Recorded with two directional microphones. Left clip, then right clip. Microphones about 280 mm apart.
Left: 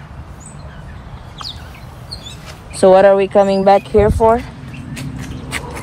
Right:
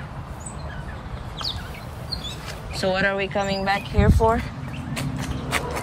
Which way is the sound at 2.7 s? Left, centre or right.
Centre.